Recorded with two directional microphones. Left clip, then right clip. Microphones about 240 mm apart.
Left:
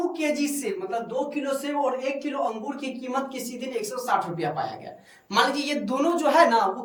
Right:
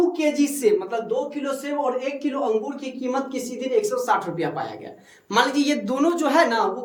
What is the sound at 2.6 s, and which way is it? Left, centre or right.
A woman's voice, right.